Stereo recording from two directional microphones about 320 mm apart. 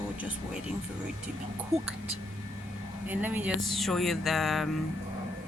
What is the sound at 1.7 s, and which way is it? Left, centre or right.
Speech, centre.